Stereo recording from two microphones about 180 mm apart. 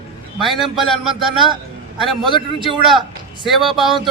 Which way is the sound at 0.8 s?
Centre (ahead or behind).